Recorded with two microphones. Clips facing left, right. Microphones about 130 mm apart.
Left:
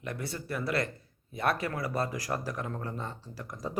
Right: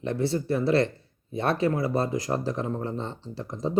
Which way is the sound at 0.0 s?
25° right (ahead or behind).